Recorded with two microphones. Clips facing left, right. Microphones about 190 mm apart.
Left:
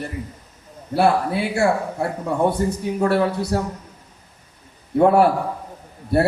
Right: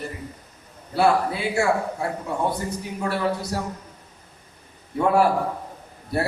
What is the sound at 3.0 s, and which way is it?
Speech, 55° left (ahead or behind).